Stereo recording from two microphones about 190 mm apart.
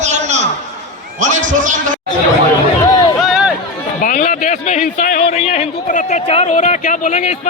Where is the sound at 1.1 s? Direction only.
40° right (ahead or behind).